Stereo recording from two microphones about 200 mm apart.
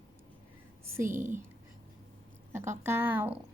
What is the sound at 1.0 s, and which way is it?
Speech, 40° right (ahead or behind).